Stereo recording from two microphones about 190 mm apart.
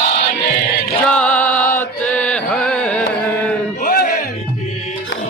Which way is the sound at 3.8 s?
50° left (ahead or behind).